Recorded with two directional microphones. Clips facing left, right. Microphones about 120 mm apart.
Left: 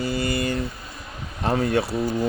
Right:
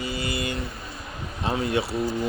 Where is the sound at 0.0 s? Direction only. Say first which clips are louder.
Left 5 dB; 45° left (ahead or behind).